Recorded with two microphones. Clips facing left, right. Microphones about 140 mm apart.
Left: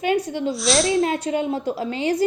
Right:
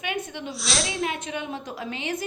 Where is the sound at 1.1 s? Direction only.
35° left (ahead or behind).